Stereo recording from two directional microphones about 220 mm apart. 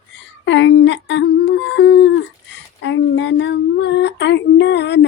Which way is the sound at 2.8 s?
55° left (ahead or behind).